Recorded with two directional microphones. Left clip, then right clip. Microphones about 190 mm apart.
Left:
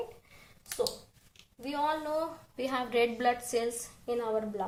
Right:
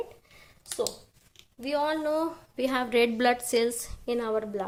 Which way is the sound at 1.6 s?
45° right (ahead or behind).